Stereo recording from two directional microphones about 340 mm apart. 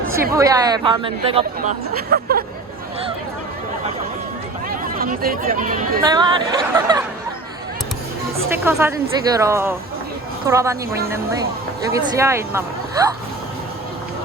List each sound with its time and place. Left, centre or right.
0.3 s speech: centre; by 2.4 s right
4.8 s speech: right
8.5 s speech: centre